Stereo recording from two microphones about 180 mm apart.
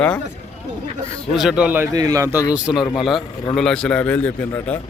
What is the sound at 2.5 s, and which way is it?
A man's voice, 5° right (ahead or behind).